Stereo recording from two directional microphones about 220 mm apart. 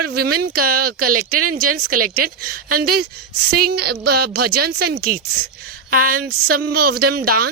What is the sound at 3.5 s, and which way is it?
Speech, 45° right (ahead or behind).